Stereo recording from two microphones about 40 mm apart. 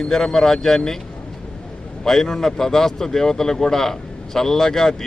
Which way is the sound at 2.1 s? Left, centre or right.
Centre.